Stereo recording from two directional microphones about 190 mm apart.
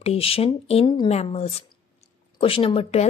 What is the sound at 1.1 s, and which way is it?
Speech, 35° left (ahead or behind).